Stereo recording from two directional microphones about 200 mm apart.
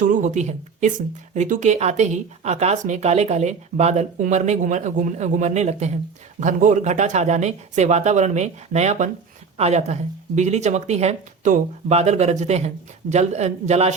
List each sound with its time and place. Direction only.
0.0 s a woman's voice: 40° right (ahead or behind)